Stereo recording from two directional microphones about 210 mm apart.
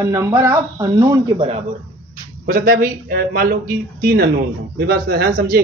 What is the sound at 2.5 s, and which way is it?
Speech, 45° right (ahead or behind).